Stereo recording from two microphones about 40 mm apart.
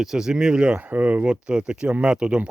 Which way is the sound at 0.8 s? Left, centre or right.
Right.